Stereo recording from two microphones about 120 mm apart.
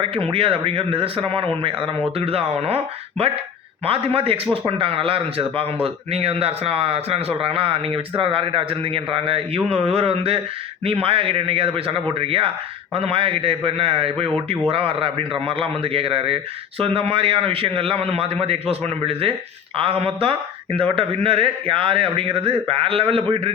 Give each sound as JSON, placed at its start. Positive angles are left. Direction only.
{"t": 0.0, "sound": "a man's voice", "side_deg": -50}